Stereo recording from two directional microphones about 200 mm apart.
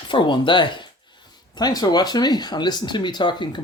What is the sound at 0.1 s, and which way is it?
Speech, 25° left (ahead or behind).